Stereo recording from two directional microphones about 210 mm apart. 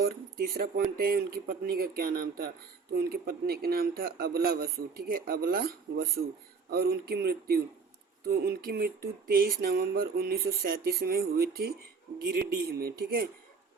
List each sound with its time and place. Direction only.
0.5 s speech: 45° right (ahead or behind)